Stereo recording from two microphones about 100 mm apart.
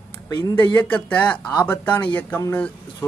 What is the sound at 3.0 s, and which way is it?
Speech, 25° left (ahead or behind).